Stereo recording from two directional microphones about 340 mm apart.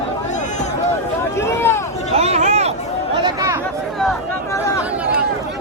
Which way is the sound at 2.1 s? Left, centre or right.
Centre.